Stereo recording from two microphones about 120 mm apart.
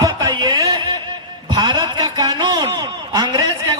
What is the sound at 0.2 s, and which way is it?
Music, 40° right (ahead or behind).